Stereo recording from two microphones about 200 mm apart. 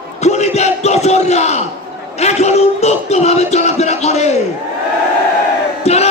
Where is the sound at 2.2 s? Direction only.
35° left (ahead or behind).